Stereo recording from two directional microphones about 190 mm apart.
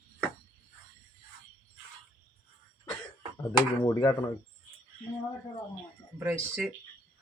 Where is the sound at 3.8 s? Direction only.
20° left (ahead or behind).